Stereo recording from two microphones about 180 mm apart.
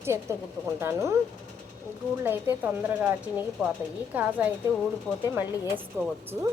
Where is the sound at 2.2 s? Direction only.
10° right (ahead or behind).